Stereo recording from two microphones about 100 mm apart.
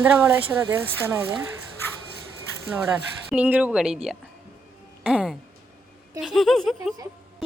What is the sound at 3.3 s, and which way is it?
Speech, 15° right (ahead or behind).